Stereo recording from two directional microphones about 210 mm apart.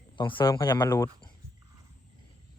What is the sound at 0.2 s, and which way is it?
Speech, 20° left (ahead or behind).